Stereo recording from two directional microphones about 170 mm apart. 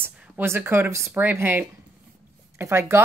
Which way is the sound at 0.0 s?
15° right (ahead or behind).